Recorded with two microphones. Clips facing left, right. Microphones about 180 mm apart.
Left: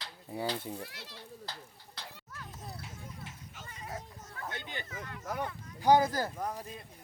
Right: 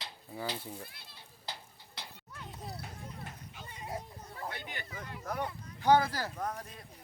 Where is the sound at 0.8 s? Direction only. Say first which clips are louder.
Left 5 dB; 80° left.